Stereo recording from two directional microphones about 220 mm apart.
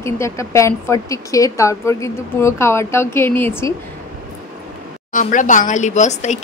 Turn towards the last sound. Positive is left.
turn(degrees=30)  # may be behind; listen again after turning